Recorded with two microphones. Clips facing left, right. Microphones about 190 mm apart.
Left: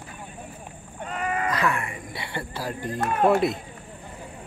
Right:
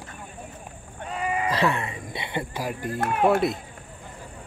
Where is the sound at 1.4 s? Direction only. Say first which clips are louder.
Right 3 dB; 30° right (ahead or behind); by 3.0 s 10° right (ahead or behind).